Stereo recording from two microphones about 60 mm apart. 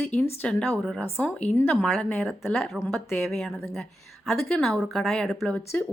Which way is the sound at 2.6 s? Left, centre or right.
Centre.